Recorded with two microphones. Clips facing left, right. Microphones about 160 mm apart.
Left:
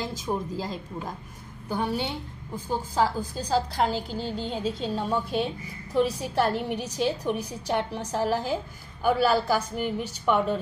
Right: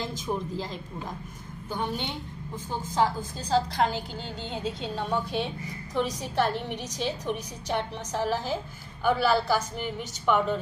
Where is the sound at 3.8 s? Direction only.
35° left (ahead or behind).